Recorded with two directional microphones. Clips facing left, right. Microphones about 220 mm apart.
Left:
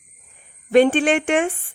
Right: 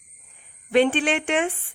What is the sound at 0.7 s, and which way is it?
Speech, 45° left (ahead or behind).